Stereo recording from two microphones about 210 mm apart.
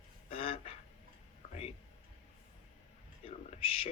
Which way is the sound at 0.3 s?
25° left (ahead or behind).